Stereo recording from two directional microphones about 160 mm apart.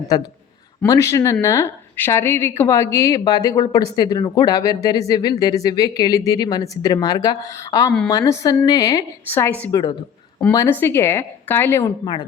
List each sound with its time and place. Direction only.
0.1 s speech: 25° left (ahead or behind)